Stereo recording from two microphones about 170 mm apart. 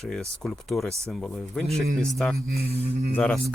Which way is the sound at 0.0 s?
5° left (ahead or behind).